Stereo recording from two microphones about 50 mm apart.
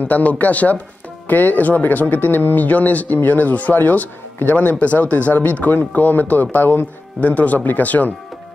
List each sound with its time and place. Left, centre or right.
0.1 s speech: left